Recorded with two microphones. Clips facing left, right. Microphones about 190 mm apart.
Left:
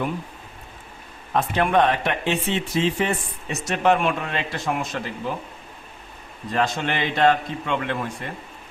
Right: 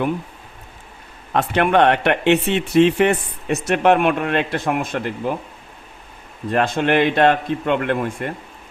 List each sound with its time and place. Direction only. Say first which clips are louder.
1.4 s speech: right 4 dB; 70° right (ahead or behind)
6.5 s speech: right 6 dB; 55° right (ahead or behind)